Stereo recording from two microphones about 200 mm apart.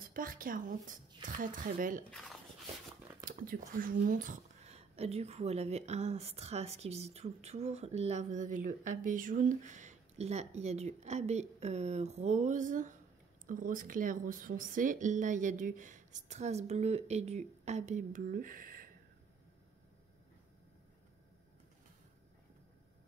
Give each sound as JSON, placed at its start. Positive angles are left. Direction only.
{"t": 0.0, "sound": "speech", "side_deg": -45}
{"t": 2.0, "sound": "speech", "side_deg": 0}
{"t": 3.3, "sound": "speech", "side_deg": -45}